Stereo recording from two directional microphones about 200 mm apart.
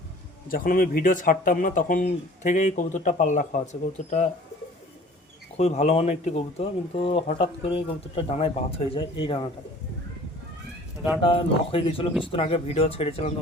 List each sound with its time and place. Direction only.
0.4 s speech: 45° left (ahead or behind)
5.5 s speech: 35° left (ahead or behind)
11.2 s speech: 25° left (ahead or behind)